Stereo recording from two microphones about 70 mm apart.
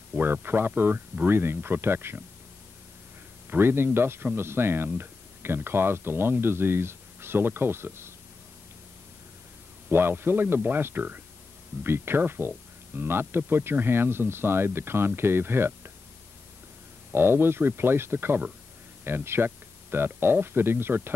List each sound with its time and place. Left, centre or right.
0.1 s speech: right
3.4 s speech: right
9.8 s speech: right
17.1 s speech: right